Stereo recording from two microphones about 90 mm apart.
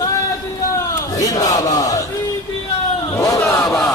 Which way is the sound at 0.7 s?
40° left (ahead or behind).